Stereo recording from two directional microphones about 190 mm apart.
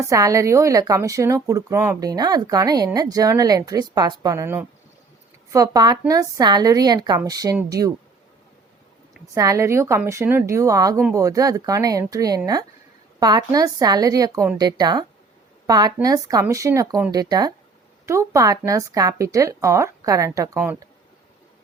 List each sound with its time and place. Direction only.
0.0 s a woman's voice: 15° right (ahead or behind)
9.3 s a woman's voice: 15° right (ahead or behind)